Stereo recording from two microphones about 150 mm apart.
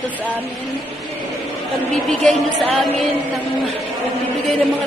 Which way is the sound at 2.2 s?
Centre (ahead or behind).